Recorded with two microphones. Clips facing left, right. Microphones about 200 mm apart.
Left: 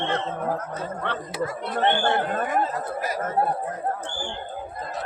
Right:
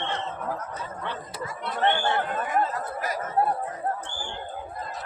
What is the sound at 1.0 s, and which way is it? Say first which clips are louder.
Speech: left 8 dB; 70° left (ahead or behind).